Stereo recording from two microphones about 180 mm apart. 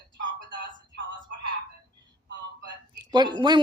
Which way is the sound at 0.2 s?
90° right.